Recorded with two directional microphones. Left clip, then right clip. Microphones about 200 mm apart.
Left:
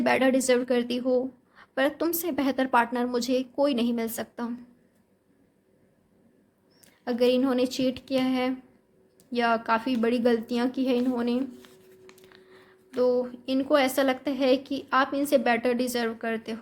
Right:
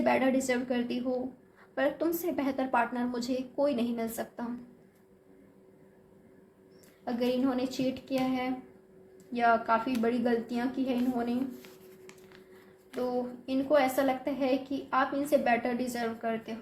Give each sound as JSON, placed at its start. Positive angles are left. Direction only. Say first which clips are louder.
{"t": 0.0, "sound": "a woman's voice", "louder": "left 4 dB", "side_deg": 45}
{"t": 7.0, "sound": "a woman's voice", "louder": "left 7 dB", "side_deg": 40}
{"t": 11.6, "sound": "a sound", "louder": "even", "side_deg": 10}
{"t": 13.0, "sound": "a woman's voice", "louder": "left 8 dB", "side_deg": 45}